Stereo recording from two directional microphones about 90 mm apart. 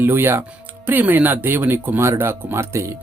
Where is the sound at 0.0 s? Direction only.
25° right (ahead or behind).